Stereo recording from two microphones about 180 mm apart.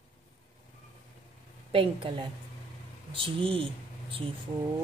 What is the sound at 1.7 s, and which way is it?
Speech, 30° right (ahead or behind).